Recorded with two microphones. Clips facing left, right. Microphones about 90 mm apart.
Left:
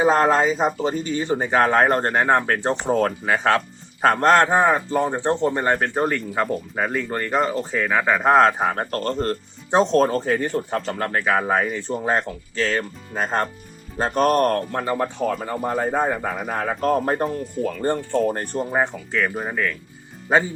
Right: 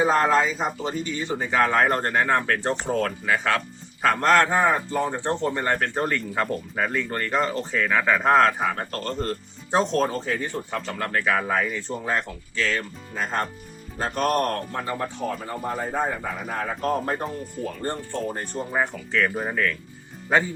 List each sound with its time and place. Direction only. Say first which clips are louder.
0.0 s speech: left 3 dB; 40° left (ahead or behind)
4.4 s speech: left 3 dB; 25° left (ahead or behind)
8.5 s speech: left 4 dB; 40° left (ahead or behind)
14.7 s speech: left 5 dB; 55° left (ahead or behind)
18.5 s speech: even; 35° left (ahead or behind)
19.1 s speech: right 1 dB; 5° left (ahead or behind)